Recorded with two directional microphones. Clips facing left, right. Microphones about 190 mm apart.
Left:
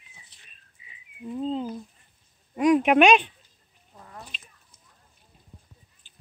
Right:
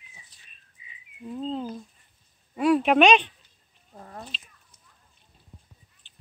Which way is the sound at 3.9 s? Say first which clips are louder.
Right 3 dB; 40° right (ahead or behind).